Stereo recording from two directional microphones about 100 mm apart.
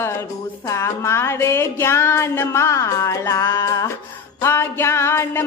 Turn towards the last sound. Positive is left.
turn(degrees=25)  # may be behind; listen again after turning